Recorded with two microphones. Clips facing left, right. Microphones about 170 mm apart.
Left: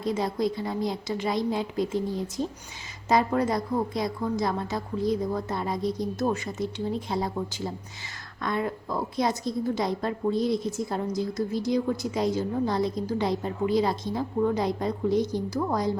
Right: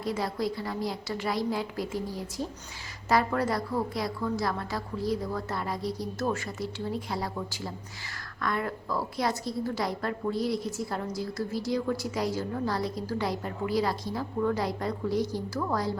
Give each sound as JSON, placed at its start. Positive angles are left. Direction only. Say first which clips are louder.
{"t": 0.0, "sound": "a woman's voice", "louder": "left 4 dB", "side_deg": 20}